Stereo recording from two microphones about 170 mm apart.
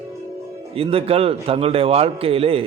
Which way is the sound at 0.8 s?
35° right (ahead or behind).